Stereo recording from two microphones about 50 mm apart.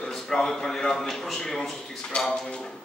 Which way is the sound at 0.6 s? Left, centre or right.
Centre.